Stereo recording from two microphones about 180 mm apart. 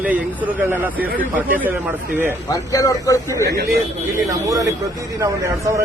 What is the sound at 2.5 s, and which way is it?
Speech, 20° left (ahead or behind).